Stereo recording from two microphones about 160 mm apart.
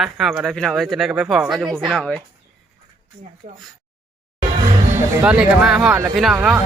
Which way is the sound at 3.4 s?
60° right (ahead or behind).